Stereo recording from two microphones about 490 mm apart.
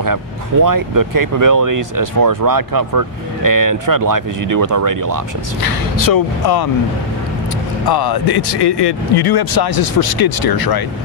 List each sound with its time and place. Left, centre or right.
0.7 s speech: right
5.6 s speech: left
7.8 s speech: left